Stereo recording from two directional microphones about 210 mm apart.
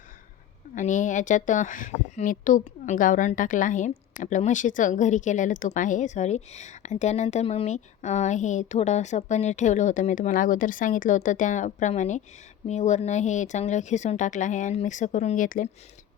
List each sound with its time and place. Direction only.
0.8 s speech: 35° left (ahead or behind)